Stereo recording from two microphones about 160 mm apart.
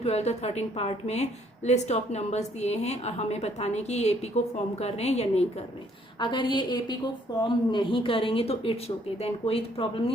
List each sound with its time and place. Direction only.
0.0 s a woman's voice: 40° left (ahead or behind)
6.1 s a woman's voice: 30° left (ahead or behind)